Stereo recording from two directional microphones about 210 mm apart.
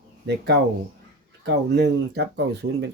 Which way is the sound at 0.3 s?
50° right (ahead or behind).